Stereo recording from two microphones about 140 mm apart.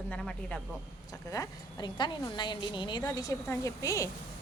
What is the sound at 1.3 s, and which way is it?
A woman's voice, 30° left (ahead or behind).